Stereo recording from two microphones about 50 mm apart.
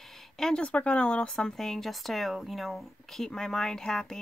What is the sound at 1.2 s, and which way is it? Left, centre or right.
Speech, centre.